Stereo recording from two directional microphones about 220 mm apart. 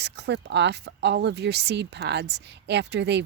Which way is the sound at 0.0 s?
50° right (ahead or behind).